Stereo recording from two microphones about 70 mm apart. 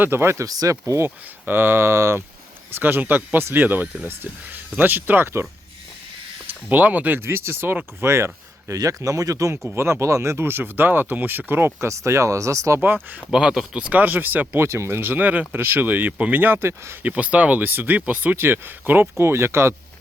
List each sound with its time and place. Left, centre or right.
0.0 s speech: right
0.4 s speech: right
1.0 s speech: right
6.7 s speech: right
8.7 s speech: right
12.8 s speech: right
13.3 s speech: centre
13.8 s speech: right
17.0 s speech: right